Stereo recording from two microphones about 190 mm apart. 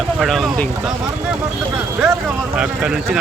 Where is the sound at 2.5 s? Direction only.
5° right (ahead or behind).